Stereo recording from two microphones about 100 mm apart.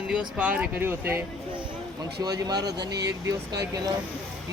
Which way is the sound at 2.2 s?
40° right (ahead or behind).